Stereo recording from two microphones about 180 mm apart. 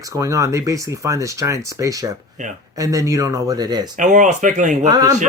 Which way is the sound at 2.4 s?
45° right (ahead or behind).